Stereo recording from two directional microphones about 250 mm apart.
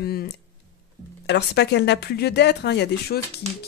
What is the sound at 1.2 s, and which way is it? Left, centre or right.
Speech, left.